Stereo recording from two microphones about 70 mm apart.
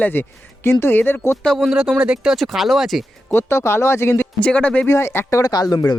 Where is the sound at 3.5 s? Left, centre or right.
Left.